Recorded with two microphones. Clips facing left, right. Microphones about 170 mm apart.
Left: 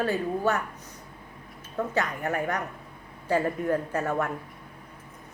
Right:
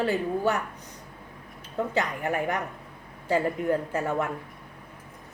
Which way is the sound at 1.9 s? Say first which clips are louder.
Even; 15° right (ahead or behind).